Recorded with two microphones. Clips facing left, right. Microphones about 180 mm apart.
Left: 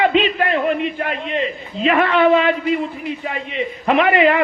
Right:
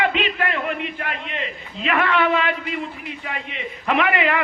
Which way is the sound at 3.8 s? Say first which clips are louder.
Left 6 dB; 30° left (ahead or behind).